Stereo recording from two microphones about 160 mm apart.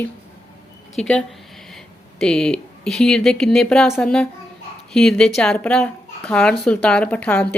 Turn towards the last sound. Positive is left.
turn(degrees=10)  # may be behind; listen again after turning